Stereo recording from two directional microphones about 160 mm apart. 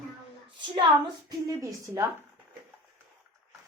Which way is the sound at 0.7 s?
25° right (ahead or behind).